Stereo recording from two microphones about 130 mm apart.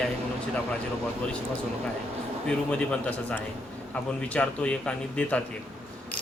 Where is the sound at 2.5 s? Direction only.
10° left (ahead or behind).